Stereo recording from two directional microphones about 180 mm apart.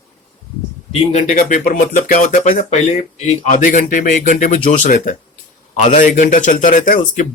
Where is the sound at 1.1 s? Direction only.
45° left (ahead or behind).